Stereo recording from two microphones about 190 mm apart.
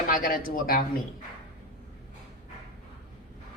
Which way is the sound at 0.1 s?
50° left (ahead or behind).